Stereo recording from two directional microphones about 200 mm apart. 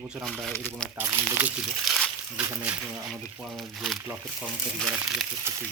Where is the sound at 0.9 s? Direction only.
10° right (ahead or behind).